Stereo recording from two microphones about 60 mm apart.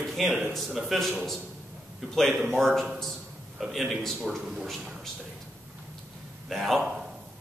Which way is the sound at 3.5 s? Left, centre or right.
Centre.